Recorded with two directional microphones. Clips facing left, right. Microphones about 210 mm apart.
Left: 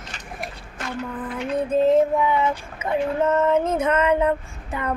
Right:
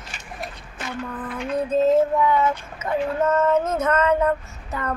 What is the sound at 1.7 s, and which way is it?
Female singing, 15° left (ahead or behind).